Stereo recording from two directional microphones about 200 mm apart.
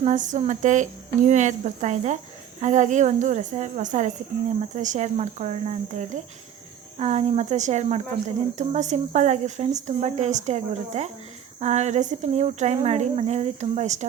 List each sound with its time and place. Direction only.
0.0 s speech: 40° right (ahead or behind)